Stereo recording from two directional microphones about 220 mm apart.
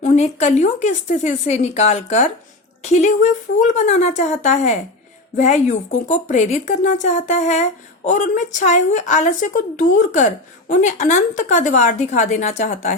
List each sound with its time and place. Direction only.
0.0 s a woman's voice: 30° left (ahead or behind)